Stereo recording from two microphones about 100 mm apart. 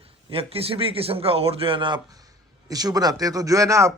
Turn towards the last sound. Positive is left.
turn(degrees=-30)  # may be behind; listen again after turning